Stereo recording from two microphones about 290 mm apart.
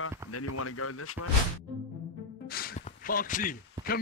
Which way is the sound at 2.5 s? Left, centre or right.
Left.